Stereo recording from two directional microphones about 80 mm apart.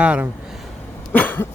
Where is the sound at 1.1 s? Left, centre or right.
Left.